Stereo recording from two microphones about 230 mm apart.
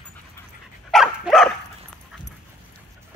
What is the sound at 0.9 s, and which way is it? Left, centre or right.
Dog, centre.